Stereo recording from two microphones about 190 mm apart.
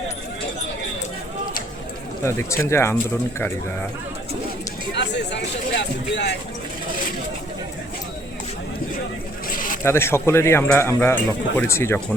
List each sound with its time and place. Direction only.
2.2 s speech: 15° left (ahead or behind)
4.9 s speech: 65° left (ahead or behind)
9.8 s speech: 15° left (ahead or behind)